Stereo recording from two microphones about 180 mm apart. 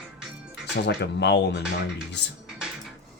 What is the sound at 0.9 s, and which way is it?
Speech, 70° left (ahead or behind).